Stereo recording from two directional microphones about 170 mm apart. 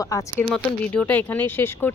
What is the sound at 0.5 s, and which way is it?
Speech, 5° left (ahead or behind).